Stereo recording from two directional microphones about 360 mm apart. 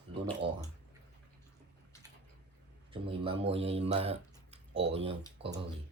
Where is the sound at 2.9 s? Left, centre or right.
Centre.